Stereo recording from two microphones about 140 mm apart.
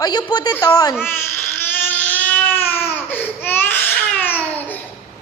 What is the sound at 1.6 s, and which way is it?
Baby cry, 10° left (ahead or behind).